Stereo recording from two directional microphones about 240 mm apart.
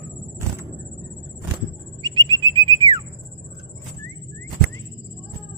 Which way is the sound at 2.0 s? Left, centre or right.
Centre.